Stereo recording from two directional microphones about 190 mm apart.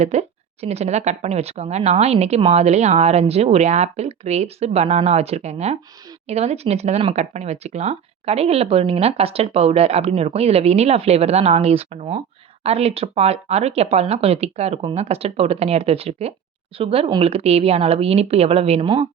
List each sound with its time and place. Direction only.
0.0 s speech: 35° right (ahead or behind)